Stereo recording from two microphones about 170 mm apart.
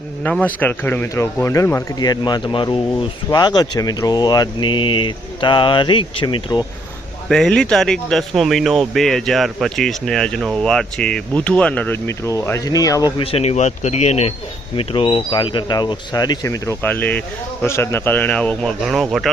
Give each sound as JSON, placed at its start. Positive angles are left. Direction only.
{"t": 0.2, "sound": "speech", "side_deg": 10}
{"t": 7.3, "sound": "speech", "side_deg": 5}
{"t": 13.3, "sound": "speech", "side_deg": 40}